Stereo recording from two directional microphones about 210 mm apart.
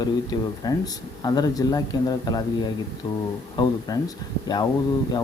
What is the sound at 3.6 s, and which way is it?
Speech, 20° left (ahead or behind).